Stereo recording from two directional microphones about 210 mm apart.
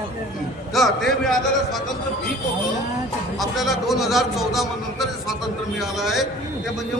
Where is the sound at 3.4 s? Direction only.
Centre (ahead or behind).